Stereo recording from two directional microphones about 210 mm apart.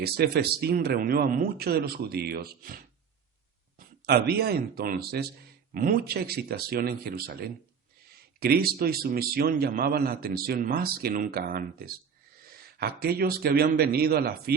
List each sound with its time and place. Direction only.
0.0 s a man's voice: 50° right (ahead or behind)